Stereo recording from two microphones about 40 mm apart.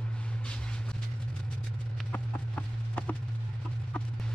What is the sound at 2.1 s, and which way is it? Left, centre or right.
Clip-clop, left.